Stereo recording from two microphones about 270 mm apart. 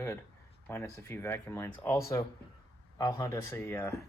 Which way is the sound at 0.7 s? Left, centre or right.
Centre.